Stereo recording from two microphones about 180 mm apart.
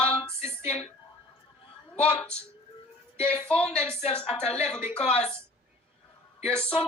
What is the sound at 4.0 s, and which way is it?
Speech, 30° left (ahead or behind).